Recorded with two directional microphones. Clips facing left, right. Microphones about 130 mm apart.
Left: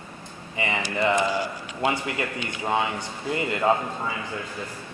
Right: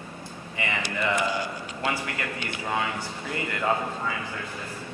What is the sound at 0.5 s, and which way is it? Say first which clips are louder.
Speech: left 4 dB; 20° left (ahead or behind).